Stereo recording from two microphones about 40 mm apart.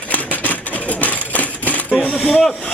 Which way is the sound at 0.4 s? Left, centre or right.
Left.